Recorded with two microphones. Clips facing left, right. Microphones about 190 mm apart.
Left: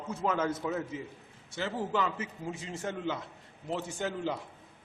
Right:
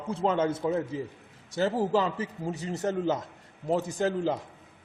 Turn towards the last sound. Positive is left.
turn(degrees=-40)  # may be behind; listen again after turning